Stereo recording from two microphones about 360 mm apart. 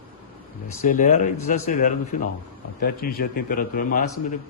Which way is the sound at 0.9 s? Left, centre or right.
Left.